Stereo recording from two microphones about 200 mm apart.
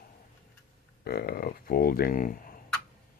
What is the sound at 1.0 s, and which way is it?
Speech, 50° left (ahead or behind).